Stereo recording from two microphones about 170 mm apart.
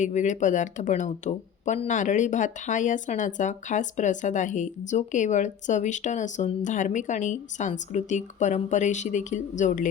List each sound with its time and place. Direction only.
0.0 s speech: 45° left (ahead or behind)